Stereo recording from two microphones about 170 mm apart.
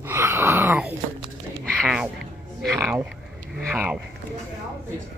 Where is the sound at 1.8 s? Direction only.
5° right (ahead or behind).